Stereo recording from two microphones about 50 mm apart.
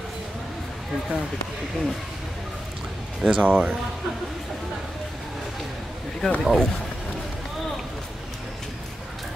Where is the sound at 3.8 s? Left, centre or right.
Centre.